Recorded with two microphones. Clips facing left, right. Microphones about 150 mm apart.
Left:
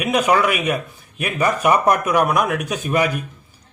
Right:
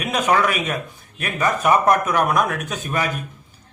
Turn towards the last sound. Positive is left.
turn(degrees=15)  # may be behind; listen again after turning